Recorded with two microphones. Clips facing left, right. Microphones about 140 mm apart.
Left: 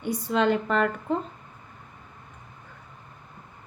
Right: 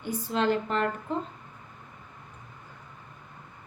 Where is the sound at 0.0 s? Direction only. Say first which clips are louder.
Left 3 dB; 70° left (ahead or behind).